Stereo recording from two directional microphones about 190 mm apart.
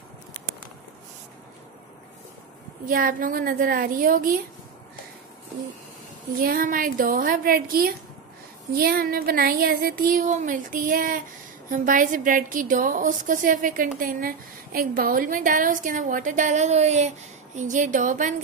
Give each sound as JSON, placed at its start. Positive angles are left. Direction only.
{"t": 2.8, "sound": "a woman's voice", "side_deg": -45}
{"t": 6.4, "sound": "a woman's voice", "side_deg": -50}